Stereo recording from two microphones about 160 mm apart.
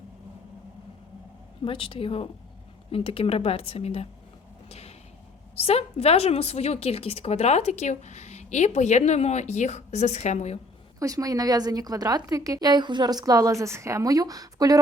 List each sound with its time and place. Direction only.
1.6 s speech: 35° left (ahead or behind)
4.7 s a sound: 40° left (ahead or behind)
5.5 s a woman's voice: 40° left (ahead or behind)
11.0 s a woman's voice: 20° right (ahead or behind)